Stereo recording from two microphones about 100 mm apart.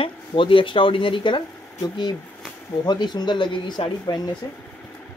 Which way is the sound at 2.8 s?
45° left (ahead or behind).